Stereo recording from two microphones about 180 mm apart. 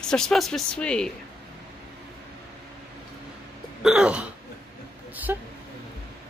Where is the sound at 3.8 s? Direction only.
5° right (ahead or behind).